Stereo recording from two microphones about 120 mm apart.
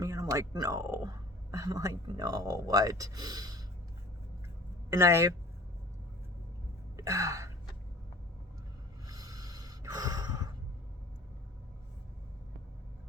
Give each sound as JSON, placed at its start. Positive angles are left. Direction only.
{"t": 0.0, "sound": "speech", "side_deg": -30}
{"t": 4.9, "sound": "speech", "side_deg": -25}
{"t": 6.9, "sound": "gasp", "side_deg": -25}
{"t": 9.0, "sound": "snort", "side_deg": -30}